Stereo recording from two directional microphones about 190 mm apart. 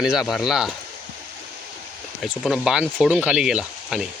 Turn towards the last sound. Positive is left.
turn(degrees=-5)  # may be behind; listen again after turning